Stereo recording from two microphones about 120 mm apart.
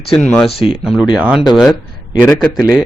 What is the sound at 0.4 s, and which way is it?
Speech, 45° left (ahead or behind).